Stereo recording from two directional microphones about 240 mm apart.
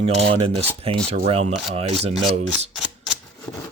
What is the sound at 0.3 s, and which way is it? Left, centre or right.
Speech, right.